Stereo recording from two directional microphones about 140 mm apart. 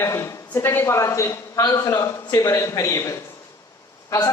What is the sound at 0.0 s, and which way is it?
Speech, 20° left (ahead or behind).